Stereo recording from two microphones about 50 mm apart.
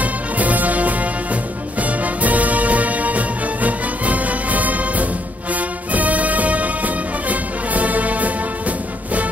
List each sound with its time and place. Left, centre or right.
0.0 s music: right